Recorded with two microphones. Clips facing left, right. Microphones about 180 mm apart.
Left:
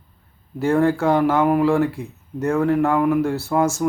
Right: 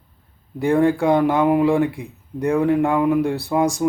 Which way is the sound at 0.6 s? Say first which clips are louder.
Right 1 dB; 15° right (ahead or behind).